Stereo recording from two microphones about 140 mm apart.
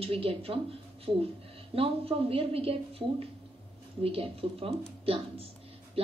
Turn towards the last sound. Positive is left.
turn(degrees=-40)  # may be behind; listen again after turning